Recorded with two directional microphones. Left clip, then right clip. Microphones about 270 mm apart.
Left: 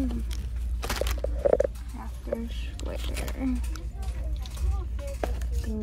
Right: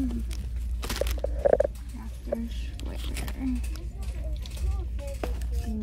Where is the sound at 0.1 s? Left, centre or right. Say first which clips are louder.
Even; right.